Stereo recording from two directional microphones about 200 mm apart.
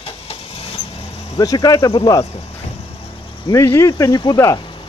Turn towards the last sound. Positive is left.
turn(degrees=20)  # may be behind; listen again after turning